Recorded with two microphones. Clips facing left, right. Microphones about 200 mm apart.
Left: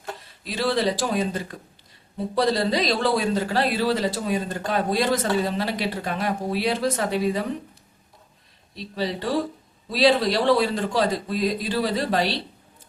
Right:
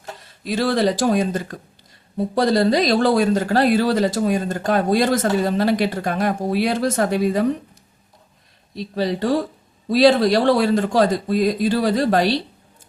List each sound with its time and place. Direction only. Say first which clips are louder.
0.4 s speech: right 4 dB; 45° right (ahead or behind)
8.7 s speech: right 5 dB; 45° right (ahead or behind)